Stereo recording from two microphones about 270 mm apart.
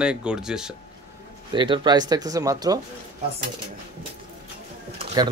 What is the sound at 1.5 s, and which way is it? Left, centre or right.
Speech, centre.